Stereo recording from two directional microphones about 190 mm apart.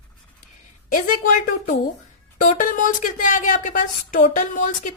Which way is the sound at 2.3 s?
45° left (ahead or behind).